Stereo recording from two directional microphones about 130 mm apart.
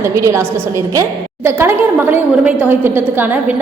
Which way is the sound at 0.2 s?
20° right (ahead or behind).